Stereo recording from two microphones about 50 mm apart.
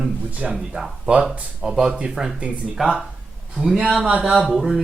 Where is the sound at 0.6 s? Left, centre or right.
Centre.